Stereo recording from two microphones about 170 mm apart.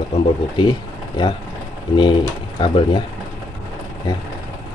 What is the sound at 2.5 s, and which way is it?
Speech, 30° left (ahead or behind).